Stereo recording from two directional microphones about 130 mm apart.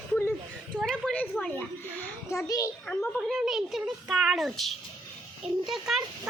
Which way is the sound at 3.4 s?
5° right (ahead or behind).